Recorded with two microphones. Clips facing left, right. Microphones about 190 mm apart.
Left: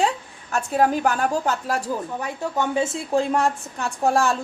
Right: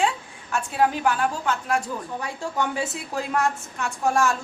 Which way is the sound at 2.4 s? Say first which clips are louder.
Left 4 dB; 20° left (ahead or behind).